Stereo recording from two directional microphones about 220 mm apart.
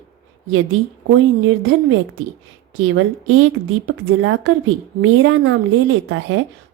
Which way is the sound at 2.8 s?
65° right (ahead or behind).